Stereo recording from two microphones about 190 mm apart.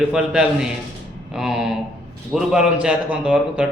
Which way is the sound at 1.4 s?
5° right (ahead or behind).